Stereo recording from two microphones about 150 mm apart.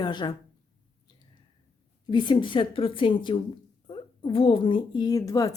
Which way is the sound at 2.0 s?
30° left (ahead or behind).